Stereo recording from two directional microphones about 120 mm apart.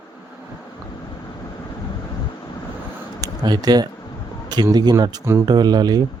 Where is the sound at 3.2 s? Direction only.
35° right (ahead or behind).